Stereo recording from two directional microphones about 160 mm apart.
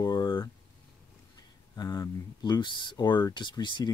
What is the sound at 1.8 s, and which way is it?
Speech, 25° left (ahead or behind).